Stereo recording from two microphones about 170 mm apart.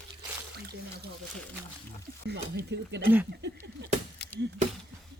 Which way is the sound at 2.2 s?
80° right.